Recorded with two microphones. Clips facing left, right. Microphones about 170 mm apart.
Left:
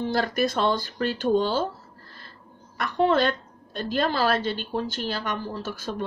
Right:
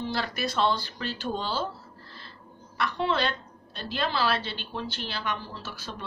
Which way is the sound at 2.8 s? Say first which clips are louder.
Left 6 dB; 45° left (ahead or behind).